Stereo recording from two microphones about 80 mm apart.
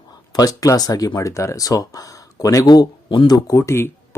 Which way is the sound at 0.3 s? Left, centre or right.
Left.